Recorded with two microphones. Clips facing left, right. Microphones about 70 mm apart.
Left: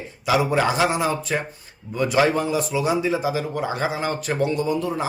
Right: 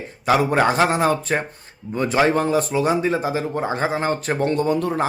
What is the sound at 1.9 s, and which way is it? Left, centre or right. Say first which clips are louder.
Speech: right 1 dB; right.